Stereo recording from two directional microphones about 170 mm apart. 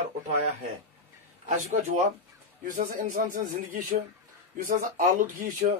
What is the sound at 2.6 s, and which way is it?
Speech, 50° right (ahead or behind).